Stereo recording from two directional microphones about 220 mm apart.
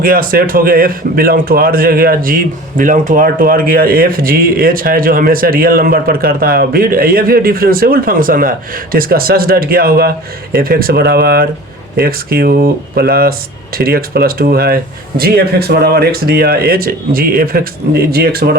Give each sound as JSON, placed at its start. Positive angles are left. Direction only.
{"t": 0.0, "sound": "a man's voice", "side_deg": -40}